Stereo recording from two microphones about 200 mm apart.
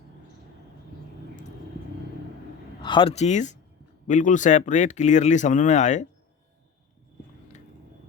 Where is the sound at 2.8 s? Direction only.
25° left (ahead or behind).